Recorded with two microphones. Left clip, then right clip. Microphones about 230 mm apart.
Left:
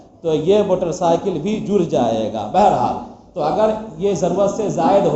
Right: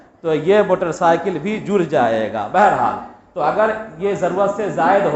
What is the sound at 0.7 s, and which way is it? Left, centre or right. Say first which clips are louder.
Speech: right 1 dB; right.